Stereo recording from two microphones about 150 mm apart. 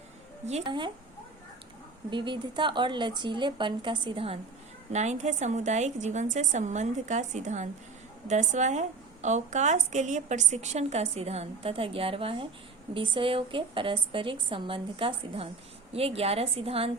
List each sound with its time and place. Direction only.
0.6 s a woman's voice: 30° right (ahead or behind)
2.0 s a woman's voice: 30° right (ahead or behind)
4.9 s a woman's voice: 50° right (ahead or behind)